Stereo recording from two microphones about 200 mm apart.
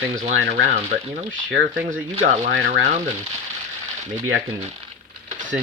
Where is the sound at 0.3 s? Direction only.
60° right (ahead or behind).